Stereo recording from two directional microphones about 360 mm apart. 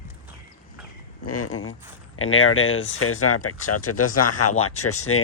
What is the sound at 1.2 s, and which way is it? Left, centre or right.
Speech, left.